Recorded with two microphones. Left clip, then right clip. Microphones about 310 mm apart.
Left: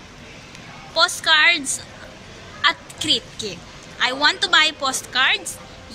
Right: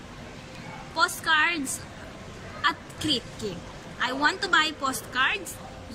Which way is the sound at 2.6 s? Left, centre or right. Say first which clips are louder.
Left 7 dB; centre.